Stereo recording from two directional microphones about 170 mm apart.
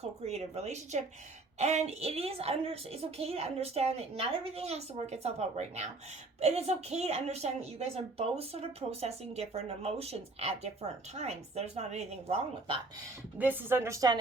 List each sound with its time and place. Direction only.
0.0 s a woman's voice: 40° right (ahead or behind)
13.4 s a woman's voice: 10° right (ahead or behind)